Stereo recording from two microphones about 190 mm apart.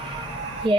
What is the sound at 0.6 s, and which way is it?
Speech, 25° right (ahead or behind).